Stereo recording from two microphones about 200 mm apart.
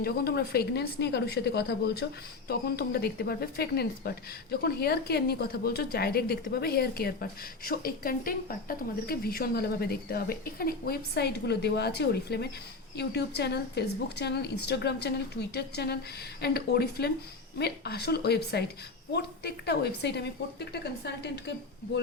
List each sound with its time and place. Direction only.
0.0 s a woman's voice: 50° left (ahead or behind)